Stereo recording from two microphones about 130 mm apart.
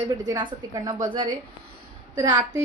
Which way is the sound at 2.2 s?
25° right (ahead or behind).